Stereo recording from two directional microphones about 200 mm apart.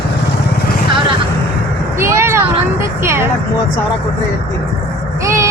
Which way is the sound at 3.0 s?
15° right (ahead or behind).